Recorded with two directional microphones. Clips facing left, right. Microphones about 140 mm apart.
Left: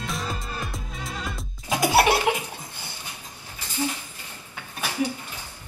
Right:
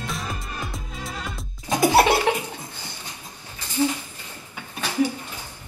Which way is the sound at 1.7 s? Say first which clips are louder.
Right 2 dB; 10° left (ahead or behind).